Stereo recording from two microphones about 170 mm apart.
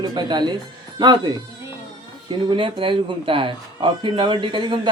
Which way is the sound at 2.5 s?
30° right (ahead or behind).